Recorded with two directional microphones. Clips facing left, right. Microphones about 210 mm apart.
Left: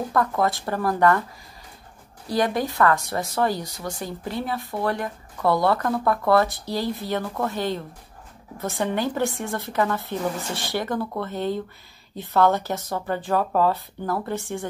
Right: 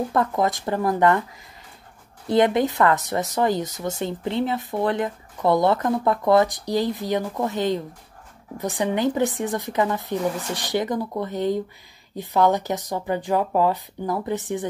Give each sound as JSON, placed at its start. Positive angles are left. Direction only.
{"t": 0.1, "sound": "speech", "side_deg": -20}
{"t": 2.2, "sound": "speech", "side_deg": -20}